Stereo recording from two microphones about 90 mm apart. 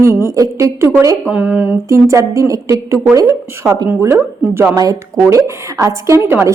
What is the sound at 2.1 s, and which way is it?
Speech, 35° right (ahead or behind).